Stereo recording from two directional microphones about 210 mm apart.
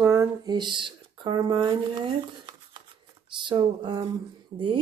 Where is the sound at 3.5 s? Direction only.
25° right (ahead or behind).